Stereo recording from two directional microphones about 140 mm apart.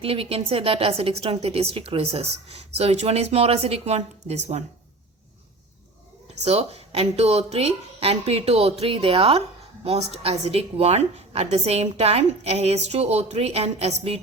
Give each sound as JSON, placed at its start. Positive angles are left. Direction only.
{"t": 0.0, "sound": "a woman's voice", "side_deg": -40}
{"t": 6.4, "sound": "a woman's voice", "side_deg": -45}